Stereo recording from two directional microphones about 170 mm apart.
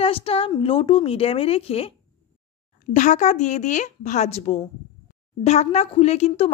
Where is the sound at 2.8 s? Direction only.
45° left (ahead or behind).